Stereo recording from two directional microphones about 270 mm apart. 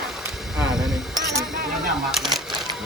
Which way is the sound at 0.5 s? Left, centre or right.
Centre.